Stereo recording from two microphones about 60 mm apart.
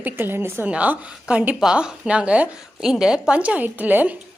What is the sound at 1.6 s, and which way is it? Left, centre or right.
Speech, centre.